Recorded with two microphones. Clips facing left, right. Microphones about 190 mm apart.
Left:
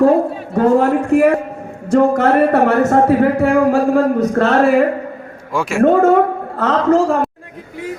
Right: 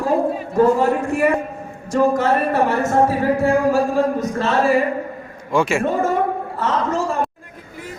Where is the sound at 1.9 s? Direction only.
60° left (ahead or behind).